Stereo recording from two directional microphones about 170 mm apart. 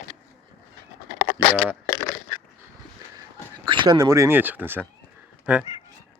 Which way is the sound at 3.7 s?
30° right (ahead or behind).